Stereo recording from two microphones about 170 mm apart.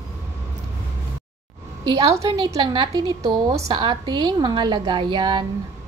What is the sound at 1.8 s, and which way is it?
A woman's voice, 30° right (ahead or behind).